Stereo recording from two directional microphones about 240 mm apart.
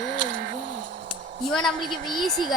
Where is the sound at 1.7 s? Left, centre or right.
Right.